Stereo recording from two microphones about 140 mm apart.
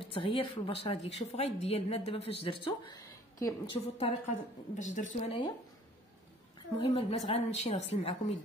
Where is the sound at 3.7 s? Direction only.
45° left (ahead or behind).